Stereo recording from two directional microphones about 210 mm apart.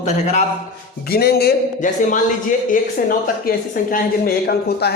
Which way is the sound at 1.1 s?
50° left (ahead or behind).